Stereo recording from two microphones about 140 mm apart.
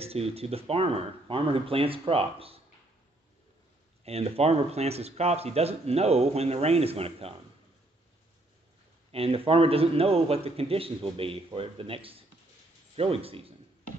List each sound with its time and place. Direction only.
0.0 s speech: 45° right (ahead or behind)
4.0 s speech: 45° right (ahead or behind)
9.1 s speech: 45° right (ahead or behind)